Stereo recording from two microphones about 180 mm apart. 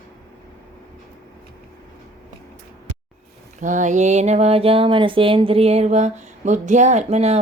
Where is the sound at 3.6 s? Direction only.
45° right (ahead or behind).